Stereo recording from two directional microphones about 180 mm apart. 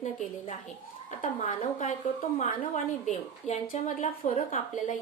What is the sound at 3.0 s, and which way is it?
A woman's voice, 40° left (ahead or behind).